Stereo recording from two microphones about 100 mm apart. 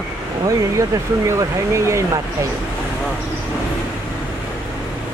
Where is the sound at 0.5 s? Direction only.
30° right (ahead or behind).